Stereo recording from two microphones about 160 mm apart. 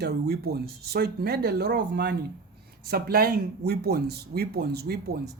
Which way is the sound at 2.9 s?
70° right (ahead or behind).